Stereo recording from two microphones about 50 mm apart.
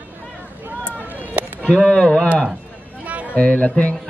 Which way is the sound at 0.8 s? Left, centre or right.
Right.